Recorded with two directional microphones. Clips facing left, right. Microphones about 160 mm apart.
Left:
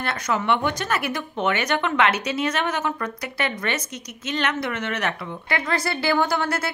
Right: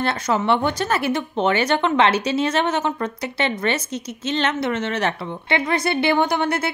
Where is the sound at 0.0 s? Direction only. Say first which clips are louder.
Right 4 dB; 30° right (ahead or behind).